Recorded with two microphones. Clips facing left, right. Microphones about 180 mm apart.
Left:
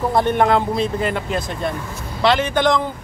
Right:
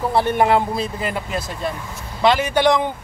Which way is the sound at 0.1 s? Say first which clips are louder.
Even; 5° right (ahead or behind).